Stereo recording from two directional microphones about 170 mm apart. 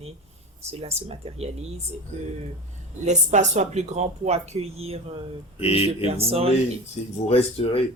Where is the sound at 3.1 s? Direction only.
40° right (ahead or behind).